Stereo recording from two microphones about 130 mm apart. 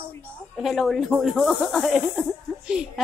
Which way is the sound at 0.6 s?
Centre (ahead or behind).